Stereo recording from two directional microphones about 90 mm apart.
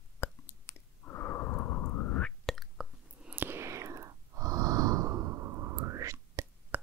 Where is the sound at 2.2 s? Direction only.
5° left (ahead or behind).